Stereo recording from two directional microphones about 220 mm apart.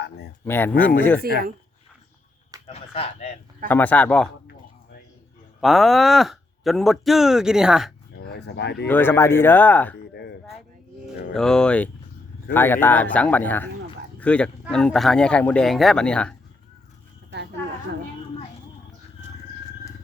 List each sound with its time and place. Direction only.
0.4 s speech: 10° left (ahead or behind)
1.3 s speech: 45° right (ahead or behind)
2.6 s speech: 25° left (ahead or behind)
3.7 s speech: 10° left (ahead or behind)
5.5 s speech: centre (ahead or behind)
8.1 s speech: 50° left (ahead or behind)
8.9 s speech: 10° left (ahead or behind)
11.3 s speech: 5° left (ahead or behind)